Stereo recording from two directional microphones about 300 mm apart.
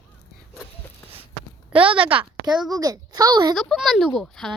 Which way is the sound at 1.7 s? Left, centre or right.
Centre.